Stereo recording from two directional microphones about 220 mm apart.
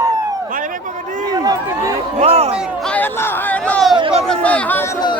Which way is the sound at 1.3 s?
15° right (ahead or behind).